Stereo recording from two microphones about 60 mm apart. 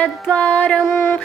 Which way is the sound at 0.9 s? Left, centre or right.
Left.